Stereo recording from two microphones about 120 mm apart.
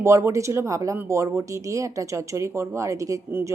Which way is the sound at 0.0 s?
25° right (ahead or behind).